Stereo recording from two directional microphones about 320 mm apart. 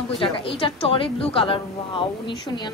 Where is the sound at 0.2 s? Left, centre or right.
Centre.